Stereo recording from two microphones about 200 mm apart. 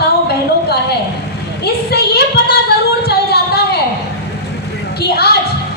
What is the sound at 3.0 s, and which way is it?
Music, 55° left (ahead or behind).